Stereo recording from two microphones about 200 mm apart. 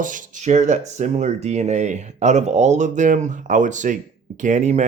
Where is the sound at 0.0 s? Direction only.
40° right (ahead or behind).